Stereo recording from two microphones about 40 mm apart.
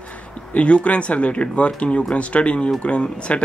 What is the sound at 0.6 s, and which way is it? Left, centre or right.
Speech, left.